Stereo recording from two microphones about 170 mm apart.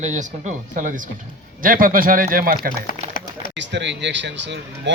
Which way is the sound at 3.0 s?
40° right (ahead or behind).